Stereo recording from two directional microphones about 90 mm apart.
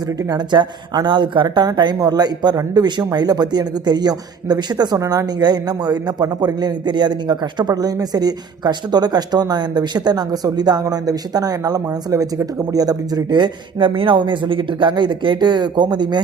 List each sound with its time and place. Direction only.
0.3 s speech: 55° right (ahead or behind)